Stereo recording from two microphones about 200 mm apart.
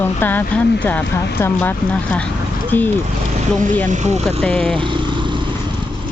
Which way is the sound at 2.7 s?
10° left (ahead or behind).